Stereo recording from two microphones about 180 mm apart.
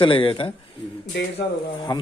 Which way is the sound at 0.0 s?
30° left (ahead or behind).